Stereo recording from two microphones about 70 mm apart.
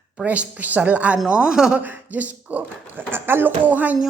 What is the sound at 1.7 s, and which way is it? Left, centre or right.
A woman's voice, right.